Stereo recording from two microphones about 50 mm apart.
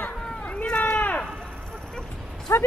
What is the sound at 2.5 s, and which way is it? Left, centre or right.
Speech, left.